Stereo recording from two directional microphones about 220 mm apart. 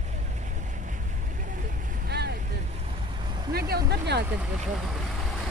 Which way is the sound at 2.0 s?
50° right (ahead or behind).